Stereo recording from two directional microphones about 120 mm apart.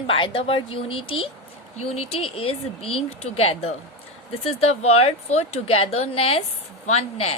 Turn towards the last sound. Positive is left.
turn(degrees=60)  # may be behind; listen again after turning